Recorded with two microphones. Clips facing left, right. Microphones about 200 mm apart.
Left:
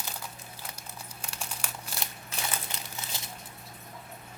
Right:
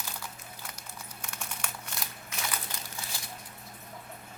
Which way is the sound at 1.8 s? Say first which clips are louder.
Left 1 dB; 30° left (ahead or behind).